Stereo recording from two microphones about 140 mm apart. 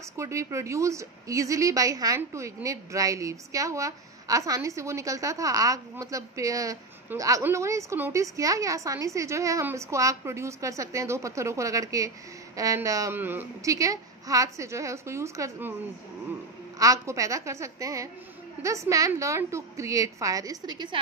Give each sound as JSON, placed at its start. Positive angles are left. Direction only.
{"t": 0.2, "sound": "a woman's voice", "side_deg": -20}
{"t": 16.7, "sound": "a woman's voice", "side_deg": -25}